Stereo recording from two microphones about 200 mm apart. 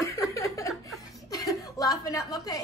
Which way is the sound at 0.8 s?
15° left (ahead or behind).